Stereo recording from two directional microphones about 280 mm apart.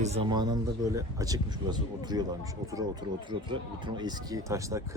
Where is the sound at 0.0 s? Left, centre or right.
Right.